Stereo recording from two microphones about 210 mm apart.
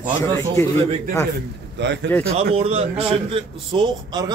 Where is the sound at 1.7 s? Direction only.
55° right (ahead or behind).